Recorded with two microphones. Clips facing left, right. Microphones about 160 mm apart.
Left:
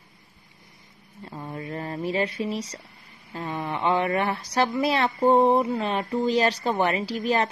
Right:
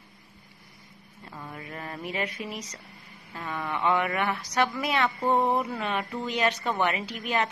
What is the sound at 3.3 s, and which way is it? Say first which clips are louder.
Speech: left 3 dB; 30° left (ahead or behind).